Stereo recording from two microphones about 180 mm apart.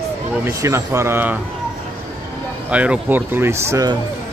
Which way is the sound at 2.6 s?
5° right (ahead or behind).